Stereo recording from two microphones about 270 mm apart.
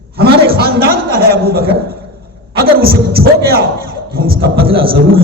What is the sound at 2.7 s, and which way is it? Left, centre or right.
A man's voice, right.